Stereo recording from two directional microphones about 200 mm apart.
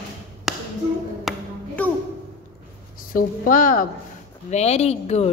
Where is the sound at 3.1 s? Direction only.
45° left (ahead or behind).